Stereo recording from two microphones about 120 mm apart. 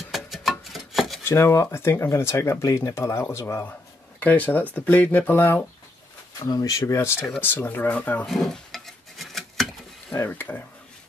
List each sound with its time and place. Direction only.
0.1 s music: centre (ahead or behind)
1.2 s speech: 25° left (ahead or behind)
6.4 s speech: 30° left (ahead or behind); by 8.3 s 15° left (ahead or behind)
8.3 s dishes: centre (ahead or behind)
10.1 s speech: 15° left (ahead or behind)